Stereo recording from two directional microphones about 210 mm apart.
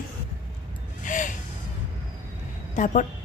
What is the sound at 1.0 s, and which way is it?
Gasp, 40° left (ahead or behind).